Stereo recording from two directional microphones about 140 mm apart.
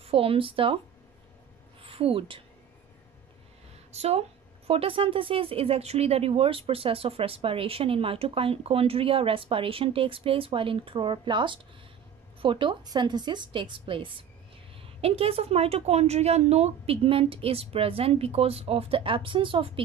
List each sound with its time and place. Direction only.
0.0 s a woman's voice: 40° right (ahead or behind)
1.8 s a woman's voice: 40° right (ahead or behind)
3.9 s a woman's voice: 50° right (ahead or behind)